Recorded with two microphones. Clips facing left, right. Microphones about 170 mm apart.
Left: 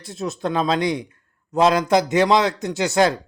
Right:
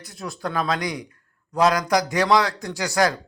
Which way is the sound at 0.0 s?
25° left (ahead or behind).